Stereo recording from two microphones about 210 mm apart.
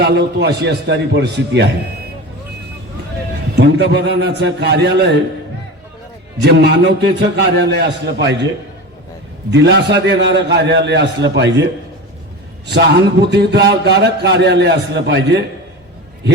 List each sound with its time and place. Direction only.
0.0 s speech: 55° right (ahead or behind)
3.5 s a man's voice: 55° right (ahead or behind)
6.4 s speech: 50° right (ahead or behind)
9.5 s speech: 55° right (ahead or behind)
12.7 s speech: 55° right (ahead or behind)